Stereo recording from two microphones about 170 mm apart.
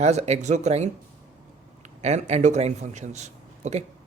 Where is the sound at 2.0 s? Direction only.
40° right (ahead or behind).